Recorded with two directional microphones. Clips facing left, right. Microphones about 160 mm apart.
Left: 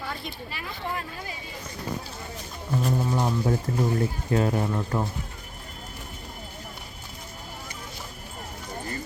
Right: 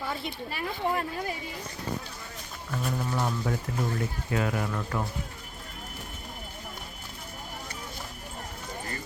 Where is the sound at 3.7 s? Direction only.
35° left (ahead or behind).